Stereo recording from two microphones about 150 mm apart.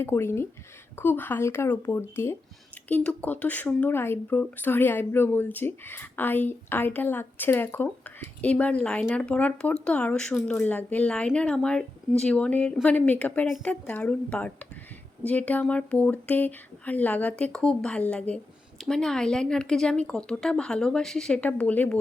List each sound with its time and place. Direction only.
0.0 s speech: 15° left (ahead or behind)